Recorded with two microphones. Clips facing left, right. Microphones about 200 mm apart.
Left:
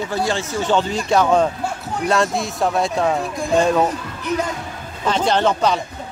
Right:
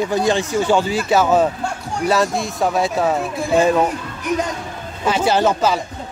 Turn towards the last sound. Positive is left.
turn(degrees=-5)  # may be behind; listen again after turning